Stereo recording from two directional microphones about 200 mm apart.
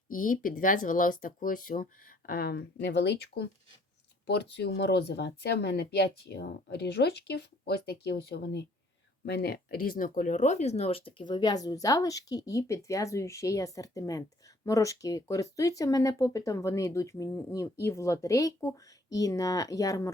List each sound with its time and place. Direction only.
0.1 s speech: 40° left (ahead or behind); by 20.1 s 15° left (ahead or behind)